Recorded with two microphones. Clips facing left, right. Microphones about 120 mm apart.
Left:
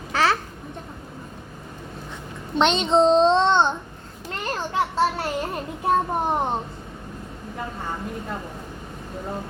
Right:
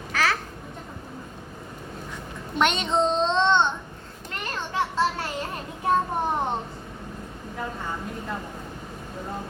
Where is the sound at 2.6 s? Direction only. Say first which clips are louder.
Left 5 dB; 25° left (ahead or behind).